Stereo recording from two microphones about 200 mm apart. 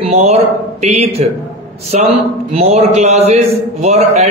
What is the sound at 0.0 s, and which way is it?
A man's voice, 30° right (ahead or behind).